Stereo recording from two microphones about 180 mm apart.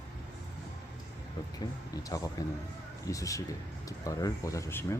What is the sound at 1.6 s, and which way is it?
Speech, 20° left (ahead or behind).